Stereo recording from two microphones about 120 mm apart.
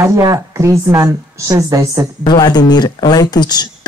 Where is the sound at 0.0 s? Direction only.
25° right (ahead or behind).